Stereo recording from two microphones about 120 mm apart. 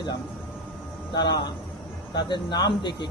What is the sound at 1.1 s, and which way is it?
Speech, 40° left (ahead or behind).